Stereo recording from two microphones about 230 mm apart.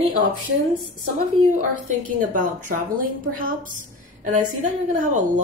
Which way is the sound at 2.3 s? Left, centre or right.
Right.